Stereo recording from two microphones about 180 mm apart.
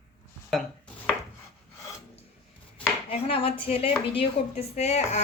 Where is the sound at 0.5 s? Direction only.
Centre (ahead or behind).